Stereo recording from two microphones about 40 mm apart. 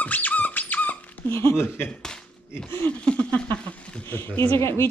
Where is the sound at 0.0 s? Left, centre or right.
Left.